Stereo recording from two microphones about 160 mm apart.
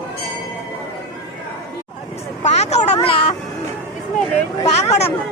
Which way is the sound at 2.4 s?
45° left (ahead or behind).